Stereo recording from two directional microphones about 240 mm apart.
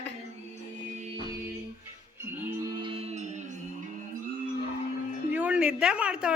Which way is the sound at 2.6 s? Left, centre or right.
Right.